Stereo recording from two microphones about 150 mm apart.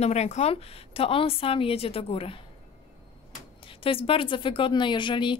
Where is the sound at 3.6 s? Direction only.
35° left (ahead or behind).